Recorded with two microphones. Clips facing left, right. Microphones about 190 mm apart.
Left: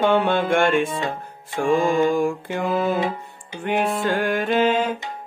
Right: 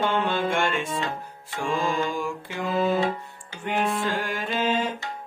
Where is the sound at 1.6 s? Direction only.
50° left (ahead or behind).